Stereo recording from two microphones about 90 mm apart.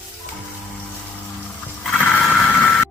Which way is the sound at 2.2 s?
Centre (ahead or behind).